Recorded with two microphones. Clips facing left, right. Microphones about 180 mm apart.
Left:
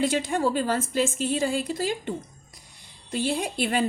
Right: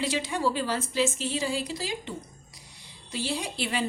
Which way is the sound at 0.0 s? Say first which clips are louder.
Left 4 dB; 50° left (ahead or behind).